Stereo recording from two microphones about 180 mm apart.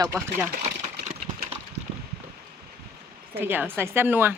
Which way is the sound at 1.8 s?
40° right (ahead or behind).